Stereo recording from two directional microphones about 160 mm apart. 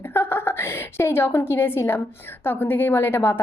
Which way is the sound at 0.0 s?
15° left (ahead or behind).